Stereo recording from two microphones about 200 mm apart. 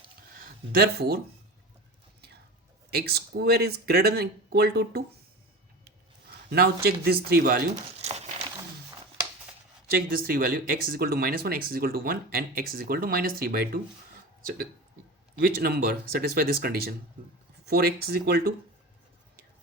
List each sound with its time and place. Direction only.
0.3 s speech: 45° right (ahead or behind)
2.9 s speech: 50° right (ahead or behind)
6.5 s speech: 50° right (ahead or behind)
8.0 s walk: 30° right (ahead or behind)
9.9 s speech: 45° right (ahead or behind)
15.4 s speech: 50° right (ahead or behind)